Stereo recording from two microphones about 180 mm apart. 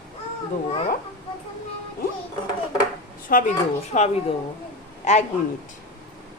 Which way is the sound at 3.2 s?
50° left (ahead or behind).